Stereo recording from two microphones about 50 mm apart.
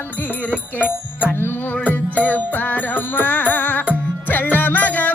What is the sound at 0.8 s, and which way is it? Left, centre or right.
Music, left.